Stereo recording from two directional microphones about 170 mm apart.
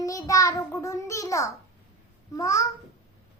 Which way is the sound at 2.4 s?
20° left (ahead or behind).